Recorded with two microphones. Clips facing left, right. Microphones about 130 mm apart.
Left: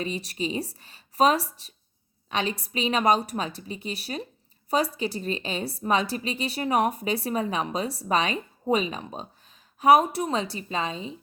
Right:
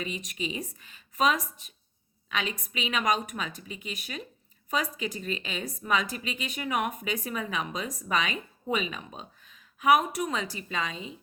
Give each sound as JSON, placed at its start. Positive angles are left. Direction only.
{"t": 0.0, "sound": "a woman's voice", "side_deg": 35}